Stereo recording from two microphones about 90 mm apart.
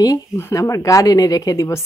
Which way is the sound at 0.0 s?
45° left (ahead or behind).